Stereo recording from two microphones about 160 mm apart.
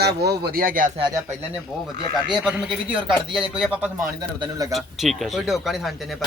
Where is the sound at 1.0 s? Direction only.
25° right (ahead or behind).